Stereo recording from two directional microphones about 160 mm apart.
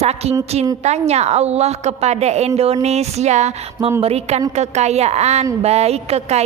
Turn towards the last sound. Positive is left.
turn(degrees=-40)  # may be behind; listen again after turning